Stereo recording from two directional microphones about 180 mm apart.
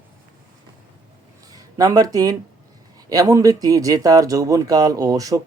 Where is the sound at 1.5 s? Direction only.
20° right (ahead or behind).